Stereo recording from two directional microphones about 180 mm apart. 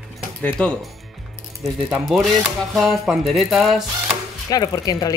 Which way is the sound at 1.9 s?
Centre (ahead or behind).